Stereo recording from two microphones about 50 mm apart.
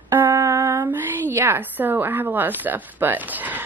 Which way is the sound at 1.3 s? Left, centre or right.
Right.